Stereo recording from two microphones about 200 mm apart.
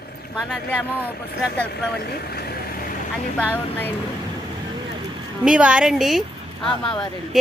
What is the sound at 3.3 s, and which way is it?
Speech, 10° left (ahead or behind).